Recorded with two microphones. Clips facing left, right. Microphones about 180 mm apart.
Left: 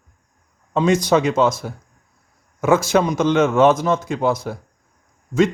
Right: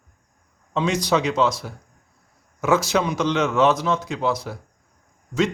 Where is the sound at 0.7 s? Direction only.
50° left (ahead or behind).